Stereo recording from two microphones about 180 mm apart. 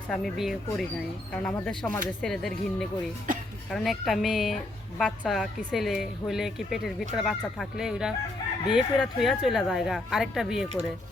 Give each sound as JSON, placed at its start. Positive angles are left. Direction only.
{"t": 0.1, "sound": "speech", "side_deg": 0}
{"t": 3.3, "sound": "speech", "side_deg": -50}
{"t": 3.7, "sound": "speech", "side_deg": 0}